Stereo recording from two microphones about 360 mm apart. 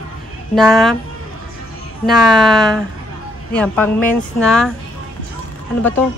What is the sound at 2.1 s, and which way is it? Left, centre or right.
Speech, centre.